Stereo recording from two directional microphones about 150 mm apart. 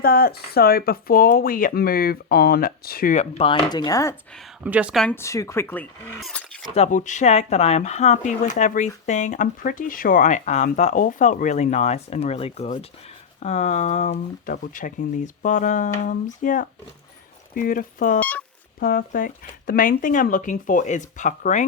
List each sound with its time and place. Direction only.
0.0 s speech: 85° left
3.2 s speech: 40° left (ahead or behind)
3.7 s speech: 25° left (ahead or behind)
4.6 s speech: 10° right (ahead or behind)
5.1 s speech: 20° left (ahead or behind); by 6.7 s 5° left (ahead or behind)
6.7 s speech: 50° left (ahead or behind)
14.5 s speech: 65° left (ahead or behind)
18.2 s a sound: 10° left (ahead or behind)
18.8 s speech: 70° left (ahead or behind); by 21.6 s 55° left (ahead or behind)